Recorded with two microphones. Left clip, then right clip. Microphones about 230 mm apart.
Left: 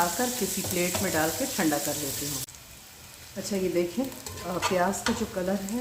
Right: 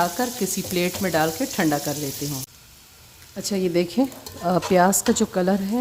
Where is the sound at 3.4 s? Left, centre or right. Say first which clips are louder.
Right 5 dB; right.